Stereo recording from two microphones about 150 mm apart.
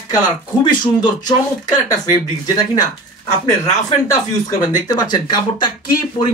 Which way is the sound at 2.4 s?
25° left (ahead or behind).